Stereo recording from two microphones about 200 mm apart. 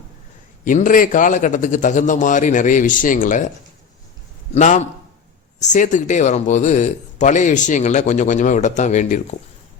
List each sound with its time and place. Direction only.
0.6 s speech: 40° left (ahead or behind)
4.5 s speech: 35° left (ahead or behind)